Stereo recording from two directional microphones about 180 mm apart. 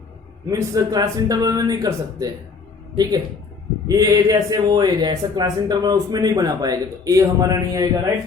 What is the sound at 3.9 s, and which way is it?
A man's voice, 20° right (ahead or behind).